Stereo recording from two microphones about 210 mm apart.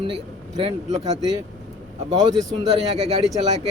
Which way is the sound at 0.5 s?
30° right (ahead or behind).